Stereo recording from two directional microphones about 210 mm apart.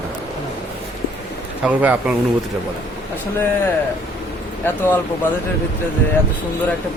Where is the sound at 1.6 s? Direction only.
5° right (ahead or behind).